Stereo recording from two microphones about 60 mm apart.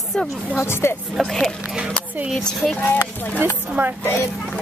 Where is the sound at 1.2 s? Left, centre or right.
Centre.